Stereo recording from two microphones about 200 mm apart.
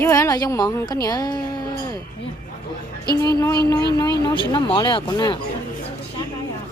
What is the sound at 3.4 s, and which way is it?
A woman's voice, 20° left (ahead or behind).